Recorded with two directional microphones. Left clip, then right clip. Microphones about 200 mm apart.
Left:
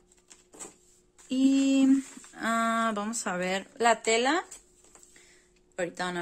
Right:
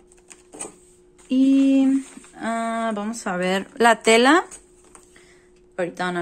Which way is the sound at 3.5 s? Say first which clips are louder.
Right 9 dB; centre (ahead or behind).